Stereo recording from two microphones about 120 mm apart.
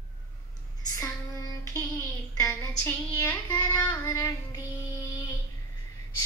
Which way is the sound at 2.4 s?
25° left (ahead or behind).